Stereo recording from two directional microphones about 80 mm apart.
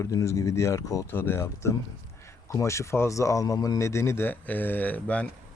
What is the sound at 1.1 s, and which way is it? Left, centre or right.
Speech, left.